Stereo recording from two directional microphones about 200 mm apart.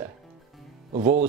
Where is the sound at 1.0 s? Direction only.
40° right (ahead or behind).